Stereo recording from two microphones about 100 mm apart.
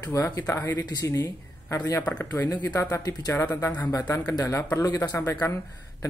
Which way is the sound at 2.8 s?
35° left (ahead or behind).